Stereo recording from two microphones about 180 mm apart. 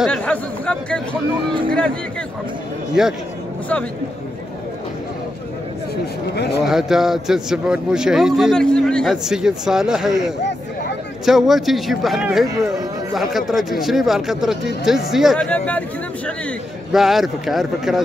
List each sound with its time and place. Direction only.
0.0 s a man's voice: 5° left (ahead or behind)
3.0 s a man's voice: 5° right (ahead or behind)
6.3 s speech: 65° left (ahead or behind)
6.6 s a man's voice: centre (ahead or behind)
11.2 s a man's voice: centre (ahead or behind)